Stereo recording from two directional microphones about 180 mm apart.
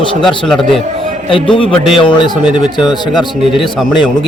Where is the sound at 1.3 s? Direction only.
30° left (ahead or behind).